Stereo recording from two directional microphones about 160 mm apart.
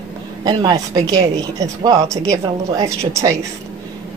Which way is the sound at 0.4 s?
30° right (ahead or behind).